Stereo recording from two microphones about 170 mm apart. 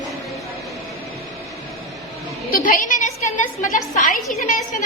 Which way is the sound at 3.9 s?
50° left (ahead or behind).